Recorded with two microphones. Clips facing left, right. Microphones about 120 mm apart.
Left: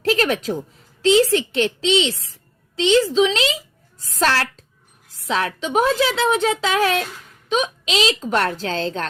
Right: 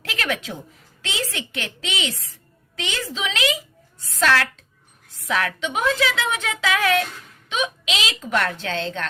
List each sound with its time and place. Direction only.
0.0 s a woman's voice: 30° left (ahead or behind)